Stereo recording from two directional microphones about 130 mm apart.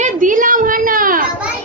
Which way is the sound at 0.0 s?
85° right.